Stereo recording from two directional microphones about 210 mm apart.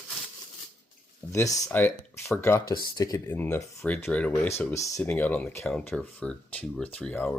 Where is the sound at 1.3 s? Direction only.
15° left (ahead or behind).